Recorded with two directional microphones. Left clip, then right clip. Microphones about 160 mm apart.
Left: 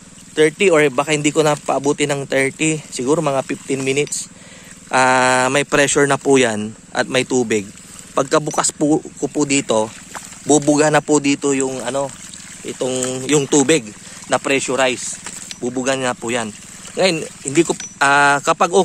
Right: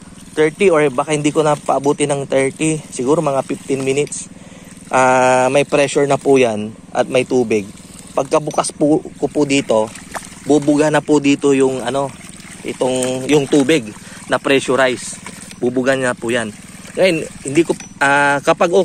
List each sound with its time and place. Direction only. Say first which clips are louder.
0.4 s speech: even; 35° left (ahead or behind)
10.4 s speech: even; 50° left (ahead or behind)
10.9 s speech: right 1 dB; 30° left (ahead or behind); by 12.1 s 10° left (ahead or behind)
12.6 s speech: right 4 dB; 35° left (ahead or behind)
14.3 s speech: right 3 dB; 10° left (ahead or behind)
15.6 s speech: right 4 dB; 15° left (ahead or behind); by 18.8 s 30° left (ahead or behind)